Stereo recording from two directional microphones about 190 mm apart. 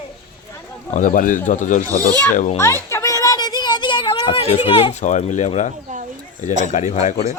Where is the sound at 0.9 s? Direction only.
45° left (ahead or behind).